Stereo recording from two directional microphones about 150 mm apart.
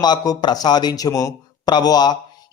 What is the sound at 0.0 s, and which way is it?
A man's voice, 30° left (ahead or behind).